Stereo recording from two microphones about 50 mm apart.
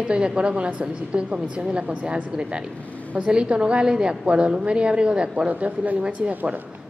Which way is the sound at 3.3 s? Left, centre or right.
Centre.